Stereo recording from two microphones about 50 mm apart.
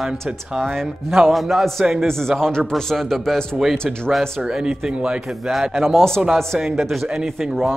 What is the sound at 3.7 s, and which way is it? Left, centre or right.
Speech, centre.